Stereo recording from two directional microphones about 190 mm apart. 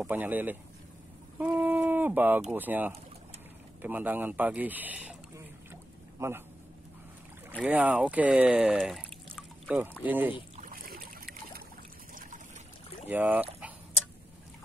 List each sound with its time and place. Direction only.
0.0 s speech: 10° right (ahead or behind)
6.1 s a man's voice: 15° right (ahead or behind)
7.6 s speech: 5° right (ahead or behind)
10.5 s boat: 45° right (ahead or behind)
13.1 s a sound: 10° right (ahead or behind)